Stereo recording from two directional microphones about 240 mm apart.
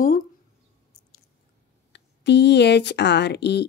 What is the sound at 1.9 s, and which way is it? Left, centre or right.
Speech, left.